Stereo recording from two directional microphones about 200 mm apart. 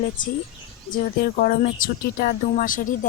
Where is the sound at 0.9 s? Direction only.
45° left (ahead or behind).